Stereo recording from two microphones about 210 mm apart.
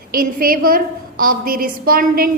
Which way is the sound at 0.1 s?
45° right (ahead or behind).